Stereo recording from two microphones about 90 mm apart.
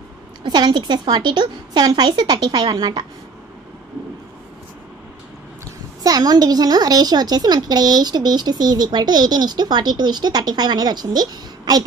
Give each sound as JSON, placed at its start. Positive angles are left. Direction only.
{"t": 0.4, "sound": "a woman's voice", "side_deg": -60}
{"t": 6.0, "sound": "a woman's voice", "side_deg": -45}